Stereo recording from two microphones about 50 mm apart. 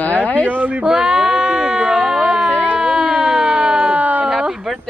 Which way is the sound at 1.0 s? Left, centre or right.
Centre.